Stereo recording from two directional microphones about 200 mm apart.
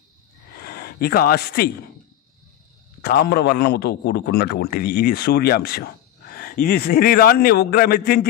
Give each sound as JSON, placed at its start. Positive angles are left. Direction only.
{"t": 0.6, "sound": "speech", "side_deg": 50}
{"t": 3.0, "sound": "a man's voice", "side_deg": 55}